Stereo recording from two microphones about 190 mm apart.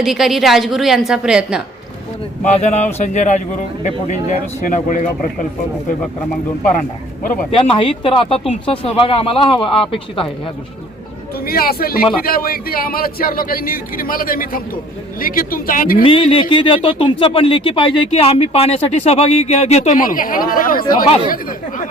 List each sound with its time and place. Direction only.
0.0 s a woman's voice: centre (ahead or behind)
2.4 s speech: 35° left (ahead or behind)
7.5 s speech: 25° left (ahead or behind)
11.4 s a man's voice: 50° left (ahead or behind)
16.0 s speech: 30° left (ahead or behind); by 20.8 s 50° left (ahead or behind)
20.8 s speech: 20° left (ahead or behind)